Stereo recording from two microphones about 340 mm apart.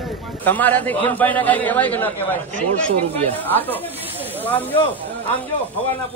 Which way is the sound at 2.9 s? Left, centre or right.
Centre.